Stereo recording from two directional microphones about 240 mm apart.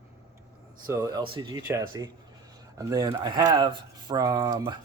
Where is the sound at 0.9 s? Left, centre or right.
Centre.